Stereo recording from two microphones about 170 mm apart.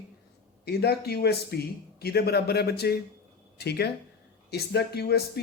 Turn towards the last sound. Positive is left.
turn(degrees=70)  # may be behind; listen again after turning